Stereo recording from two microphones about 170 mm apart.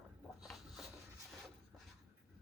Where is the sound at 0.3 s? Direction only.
Centre (ahead or behind).